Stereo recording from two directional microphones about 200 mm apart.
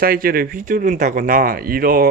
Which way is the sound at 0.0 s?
50° right (ahead or behind).